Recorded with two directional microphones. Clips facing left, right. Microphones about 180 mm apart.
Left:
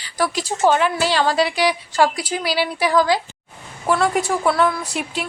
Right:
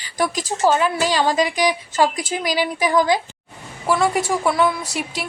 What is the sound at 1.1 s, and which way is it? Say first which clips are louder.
A woman's voice: even; 15° right (ahead or behind).